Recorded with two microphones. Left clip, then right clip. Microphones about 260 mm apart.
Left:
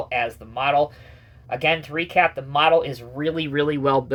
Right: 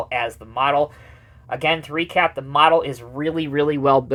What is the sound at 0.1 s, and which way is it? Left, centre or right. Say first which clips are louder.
Speech: right 1 dB; right.